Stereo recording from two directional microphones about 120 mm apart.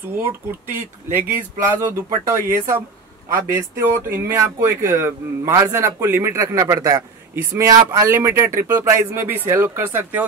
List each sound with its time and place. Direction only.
0.1 s speech: 15° right (ahead or behind)